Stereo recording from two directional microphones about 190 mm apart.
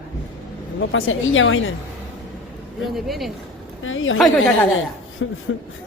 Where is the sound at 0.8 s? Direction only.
90° left.